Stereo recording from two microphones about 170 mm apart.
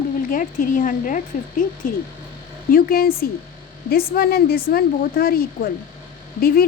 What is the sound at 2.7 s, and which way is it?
Speech, 60° left (ahead or behind).